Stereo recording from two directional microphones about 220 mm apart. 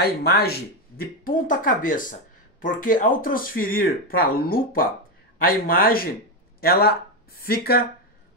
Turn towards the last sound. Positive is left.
turn(degrees=45)  # may be behind; listen again after turning